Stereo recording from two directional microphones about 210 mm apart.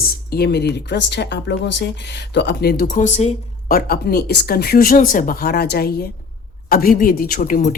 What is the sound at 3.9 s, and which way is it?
Speech, 45° left (ahead or behind).